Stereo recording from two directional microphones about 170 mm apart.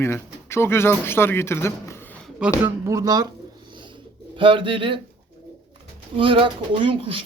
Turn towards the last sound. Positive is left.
turn(degrees=-30)  # may be behind; listen again after turning